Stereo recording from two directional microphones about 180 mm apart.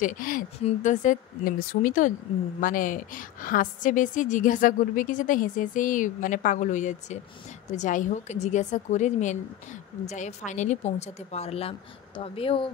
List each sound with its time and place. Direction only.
0.0 s a woman's voice: 50° left (ahead or behind); by 12.6 s 30° left (ahead or behind)